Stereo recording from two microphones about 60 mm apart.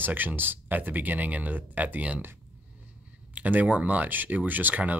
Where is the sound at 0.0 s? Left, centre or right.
Right.